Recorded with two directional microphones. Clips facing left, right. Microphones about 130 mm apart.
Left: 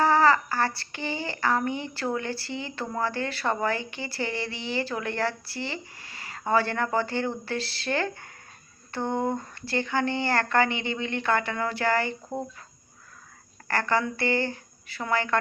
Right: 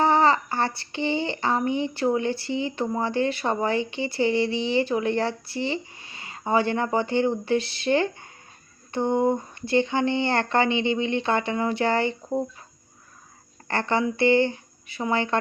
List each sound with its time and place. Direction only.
0.0 s child singing: 20° right (ahead or behind)
12.3 s speech: 15° right (ahead or behind)
13.7 s child singing: 20° right (ahead or behind)